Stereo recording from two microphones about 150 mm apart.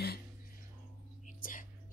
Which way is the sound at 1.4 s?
65° left (ahead or behind).